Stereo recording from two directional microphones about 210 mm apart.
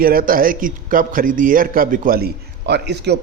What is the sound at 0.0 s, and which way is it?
A man's voice, 45° right (ahead or behind).